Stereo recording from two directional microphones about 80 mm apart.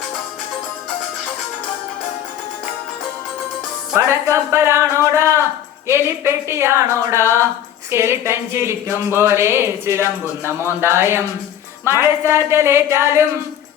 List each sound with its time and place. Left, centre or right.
3.9 s speech: right